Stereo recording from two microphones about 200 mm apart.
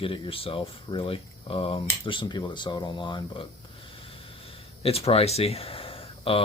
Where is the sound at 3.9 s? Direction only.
30° left (ahead or behind).